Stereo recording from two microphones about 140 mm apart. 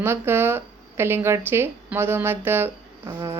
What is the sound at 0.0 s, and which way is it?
A woman's voice, 15° right (ahead or behind).